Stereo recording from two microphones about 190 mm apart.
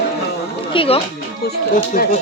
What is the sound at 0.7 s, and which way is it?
Speech, 30° left (ahead or behind).